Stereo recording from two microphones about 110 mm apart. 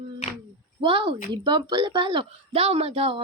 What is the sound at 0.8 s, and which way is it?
Speech, 55° right (ahead or behind).